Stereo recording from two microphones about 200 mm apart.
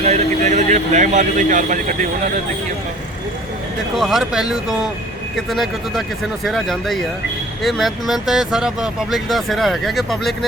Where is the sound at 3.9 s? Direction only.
Centre (ahead or behind).